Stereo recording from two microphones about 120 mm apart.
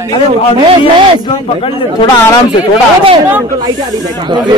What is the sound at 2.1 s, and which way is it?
Speech, 25° left (ahead or behind).